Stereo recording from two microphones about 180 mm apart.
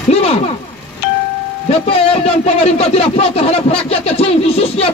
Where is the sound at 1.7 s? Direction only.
35° left (ahead or behind).